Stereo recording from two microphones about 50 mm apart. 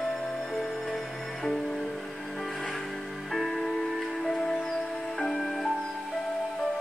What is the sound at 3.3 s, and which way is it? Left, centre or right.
Music, centre.